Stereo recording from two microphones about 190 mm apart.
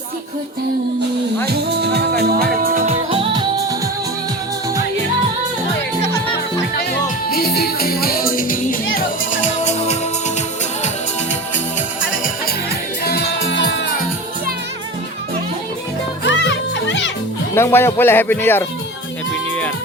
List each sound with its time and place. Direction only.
1.5 s music: 60° right (ahead or behind); by 3.8 s 20° right (ahead or behind)
7.3 s music: 55° left (ahead or behind)
13.1 s music: 55° left (ahead or behind)
16.3 s music: 75° left (ahead or behind)
17.5 s speech: 15° left (ahead or behind)